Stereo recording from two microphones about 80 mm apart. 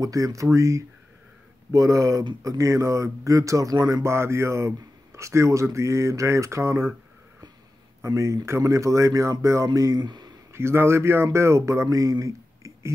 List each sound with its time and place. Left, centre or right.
0.0 s speech: right
4.0 s speech: right
8.0 s speech: right
9.9 s speech: right
10.5 s speech: right